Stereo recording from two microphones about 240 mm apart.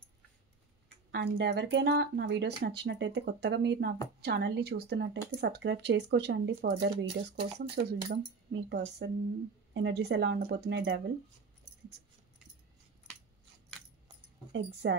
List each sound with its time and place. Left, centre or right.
1.1 s a woman's voice: right
14.5 s a woman's voice: right